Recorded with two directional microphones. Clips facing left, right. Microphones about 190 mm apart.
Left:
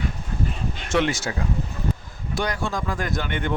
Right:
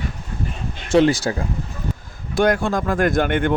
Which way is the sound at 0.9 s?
35° right (ahead or behind).